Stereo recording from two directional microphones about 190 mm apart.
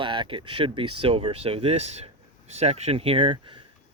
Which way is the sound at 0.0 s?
25° right (ahead or behind).